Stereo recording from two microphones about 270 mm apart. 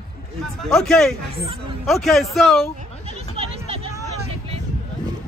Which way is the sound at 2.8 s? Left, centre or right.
Right.